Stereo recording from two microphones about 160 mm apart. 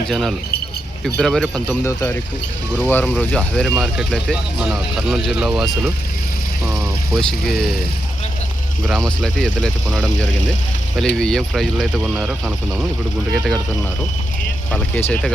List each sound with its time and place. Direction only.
0.1 s speech: centre (ahead or behind)
1.8 s speech: 15° left (ahead or behind); by 5.9 s centre (ahead or behind)
6.7 s vehicle: 15° right (ahead or behind)
7.2 s speech: 5° left (ahead or behind)
8.9 s speech: centre (ahead or behind)
14.7 s speech: 10° left (ahead or behind)